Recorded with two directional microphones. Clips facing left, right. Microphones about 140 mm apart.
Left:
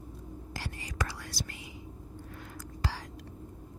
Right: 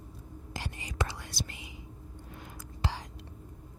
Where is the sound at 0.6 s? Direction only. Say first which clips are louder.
Right 2 dB; 20° right (ahead or behind).